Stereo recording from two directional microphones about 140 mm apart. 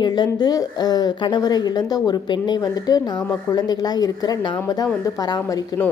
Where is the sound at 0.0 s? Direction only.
30° left (ahead or behind).